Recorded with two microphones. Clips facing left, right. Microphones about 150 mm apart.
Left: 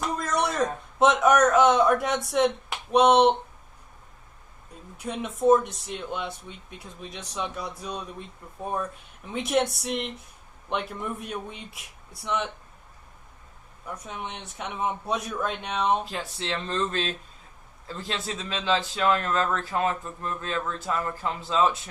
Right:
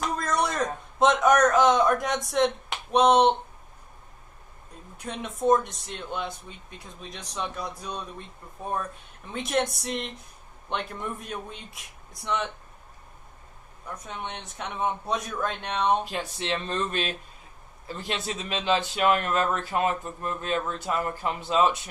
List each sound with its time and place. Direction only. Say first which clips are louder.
0.0 s a sound: even; 5° left (ahead or behind)
0.9 s speech: left 1 dB; 5° left (ahead or behind)
4.9 s speech: left 3 dB; 5° left (ahead or behind)
9.2 s speech: left 2 dB; 5° left (ahead or behind)
13.8 s speech: even; 5° left (ahead or behind)
16.0 s speech: right 2 dB; 20° right (ahead or behind)